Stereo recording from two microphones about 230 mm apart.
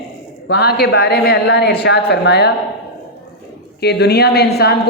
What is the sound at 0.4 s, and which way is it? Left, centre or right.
A woman's voice, left.